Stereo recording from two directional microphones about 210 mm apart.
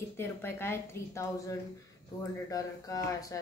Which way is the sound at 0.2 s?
10° left (ahead or behind).